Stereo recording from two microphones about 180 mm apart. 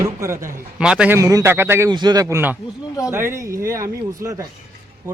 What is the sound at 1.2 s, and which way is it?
Speech, 20° right (ahead or behind).